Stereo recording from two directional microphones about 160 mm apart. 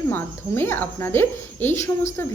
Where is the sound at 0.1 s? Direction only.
15° left (ahead or behind).